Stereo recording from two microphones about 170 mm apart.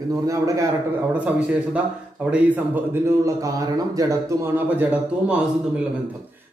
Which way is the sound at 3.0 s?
20° right (ahead or behind).